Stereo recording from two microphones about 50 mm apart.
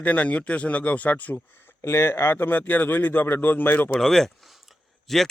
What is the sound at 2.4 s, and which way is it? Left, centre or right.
A man's voice, left.